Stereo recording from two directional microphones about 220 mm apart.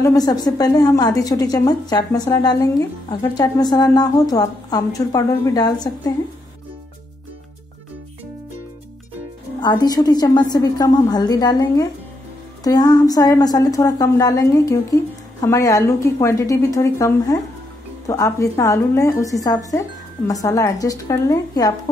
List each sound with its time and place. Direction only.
0.0 s a woman's voice: 15° left (ahead or behind)
9.6 s a woman's voice: 20° left (ahead or behind)